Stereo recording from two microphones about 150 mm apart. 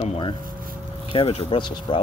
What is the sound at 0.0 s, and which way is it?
Speech, 45° left (ahead or behind).